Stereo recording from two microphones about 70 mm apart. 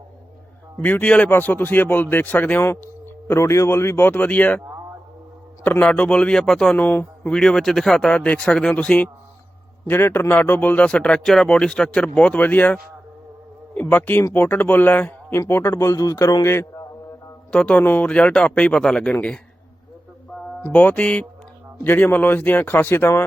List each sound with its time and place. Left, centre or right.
0.8 s a man's voice: left
1.3 s a man's voice: left
3.2 s speech: left
5.6 s speech: left
6.7 s speech: left
7.3 s speech: centre
9.8 s a man's voice: left
11.2 s a man's voice: centre; by 15.4 s left
15.4 s speech: left
15.7 s speech: left
16.4 s speech: left
17.5 s speech: centre
20.6 s a man's voice: left
21.8 s a man's voice: left